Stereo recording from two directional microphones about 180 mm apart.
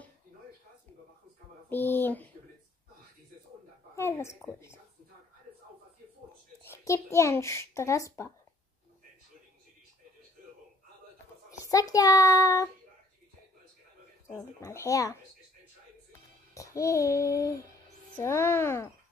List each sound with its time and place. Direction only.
1.7 s speech: 10° left (ahead or behind)
3.9 s speech: 15° left (ahead or behind)
6.6 s a child's voice: 15° left (ahead or behind)
11.6 s a child's voice: 20° left (ahead or behind)
14.2 s speech: 15° left (ahead or behind)
16.5 s a child's voice: 15° left (ahead or behind)